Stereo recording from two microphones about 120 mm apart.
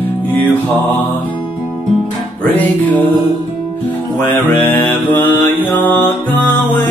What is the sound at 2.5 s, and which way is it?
Music, 15° left (ahead or behind).